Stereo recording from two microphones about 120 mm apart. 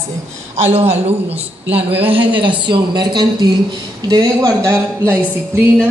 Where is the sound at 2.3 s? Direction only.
45° right (ahead or behind); by 5.1 s 25° right (ahead or behind).